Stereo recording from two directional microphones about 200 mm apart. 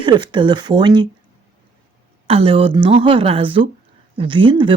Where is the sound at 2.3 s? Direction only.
30° right (ahead or behind).